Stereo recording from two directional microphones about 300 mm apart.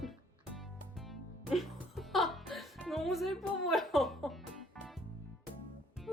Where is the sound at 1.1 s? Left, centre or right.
Centre.